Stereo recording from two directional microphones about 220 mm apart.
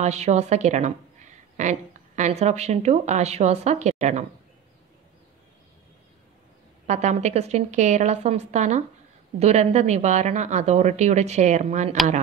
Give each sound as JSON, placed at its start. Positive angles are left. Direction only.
{"t": 0.0, "sound": "a woman's voice", "side_deg": -30}
{"t": 6.9, "sound": "a woman's voice", "side_deg": -30}